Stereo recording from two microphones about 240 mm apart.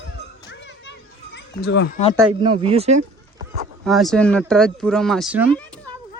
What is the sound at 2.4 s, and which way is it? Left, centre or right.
Speech, right.